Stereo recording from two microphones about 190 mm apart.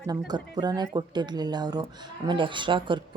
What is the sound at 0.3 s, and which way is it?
Speech, 20° right (ahead or behind).